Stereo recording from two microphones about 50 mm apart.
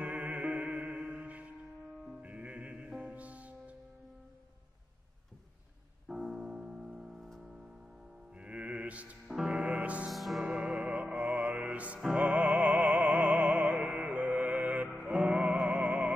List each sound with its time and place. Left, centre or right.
0.0 s music: right
1.2 s music: right
6.0 s music: centre
7.2 s music: centre
8.4 s mantra: right
9.3 s music: centre
10.0 s music: centre
10.4 s music: right
12.0 s music: centre
12.3 s music: right
15.0 s music: centre